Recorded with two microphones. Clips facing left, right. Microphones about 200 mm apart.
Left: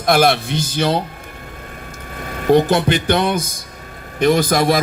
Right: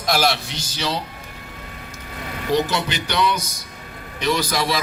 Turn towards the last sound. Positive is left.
turn(degrees=50)  # may be behind; listen again after turning